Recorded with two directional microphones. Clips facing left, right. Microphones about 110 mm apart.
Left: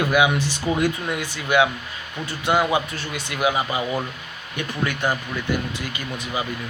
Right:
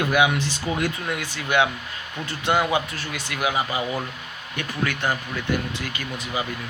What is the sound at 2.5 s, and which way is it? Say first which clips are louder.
Speech: left 2 dB; 15° left (ahead or behind).